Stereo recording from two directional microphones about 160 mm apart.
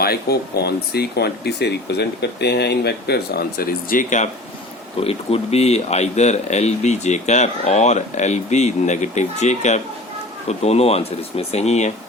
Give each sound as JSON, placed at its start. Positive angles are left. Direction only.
{"t": 0.0, "sound": "speech", "side_deg": 80}
{"t": 4.9, "sound": "speech", "side_deg": 40}